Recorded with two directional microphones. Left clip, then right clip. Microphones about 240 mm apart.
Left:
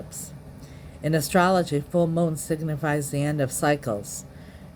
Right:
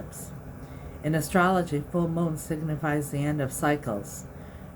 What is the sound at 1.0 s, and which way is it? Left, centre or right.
Speech, left.